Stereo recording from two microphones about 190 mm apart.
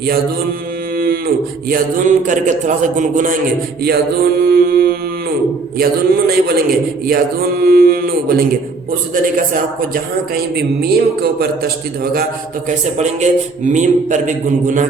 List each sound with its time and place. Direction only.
0.9 s livestock: 50° right (ahead or behind)
1.7 s a man's voice: 40° right (ahead or behind)
3.8 s mantra: 55° right (ahead or behind)
5.7 s speech: 55° right (ahead or behind)
9.9 s a man's voice: 55° right (ahead or behind)
12.6 s a man's voice: 40° right (ahead or behind)